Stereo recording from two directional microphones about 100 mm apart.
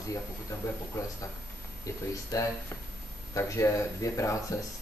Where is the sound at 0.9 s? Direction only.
35° left (ahead or behind).